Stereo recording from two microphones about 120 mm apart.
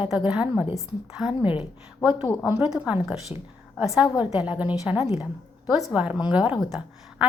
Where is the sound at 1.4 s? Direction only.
45° left (ahead or behind).